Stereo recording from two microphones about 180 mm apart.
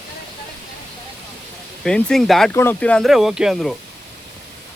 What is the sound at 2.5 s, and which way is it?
Speech, 10° left (ahead or behind).